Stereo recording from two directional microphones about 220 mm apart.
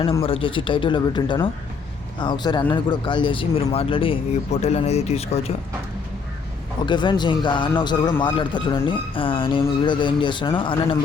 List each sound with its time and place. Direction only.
0.2 s a man's voice: 25° left (ahead or behind)
6.8 s a man's voice: 20° left (ahead or behind)